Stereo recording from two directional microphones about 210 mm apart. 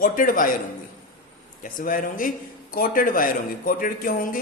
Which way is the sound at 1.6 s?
40° left (ahead or behind).